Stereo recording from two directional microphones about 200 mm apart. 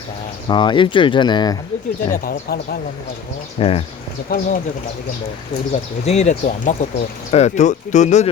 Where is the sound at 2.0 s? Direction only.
45° left (ahead or behind).